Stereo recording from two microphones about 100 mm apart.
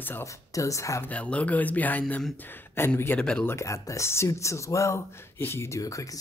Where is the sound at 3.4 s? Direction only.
30° left (ahead or behind).